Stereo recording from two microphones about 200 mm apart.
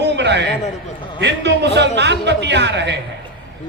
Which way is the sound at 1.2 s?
60° right (ahead or behind).